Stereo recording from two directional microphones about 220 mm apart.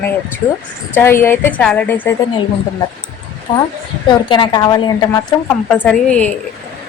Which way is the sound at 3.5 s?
20° left (ahead or behind).